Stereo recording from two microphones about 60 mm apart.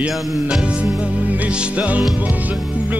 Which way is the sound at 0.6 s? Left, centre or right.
Centre.